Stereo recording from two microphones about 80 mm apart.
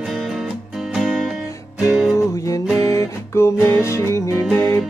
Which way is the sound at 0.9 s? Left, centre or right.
Centre.